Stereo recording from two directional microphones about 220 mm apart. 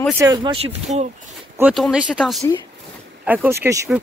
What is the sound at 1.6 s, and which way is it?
Speech, centre (ahead or behind).